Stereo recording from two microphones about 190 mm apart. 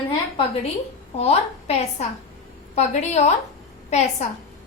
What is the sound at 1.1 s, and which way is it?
A woman's voice, 35° left (ahead or behind).